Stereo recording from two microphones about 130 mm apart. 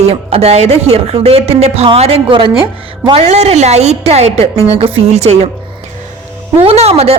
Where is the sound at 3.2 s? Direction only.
55° right (ahead or behind).